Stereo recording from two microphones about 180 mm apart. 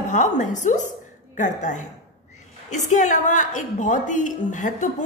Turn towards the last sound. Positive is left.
turn(degrees=45)  # may be behind; listen again after turning